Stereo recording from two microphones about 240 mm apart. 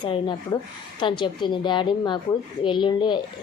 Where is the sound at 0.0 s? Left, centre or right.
Centre.